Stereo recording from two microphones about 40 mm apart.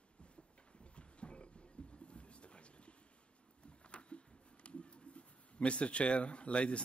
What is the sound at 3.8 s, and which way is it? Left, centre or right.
Speech, left.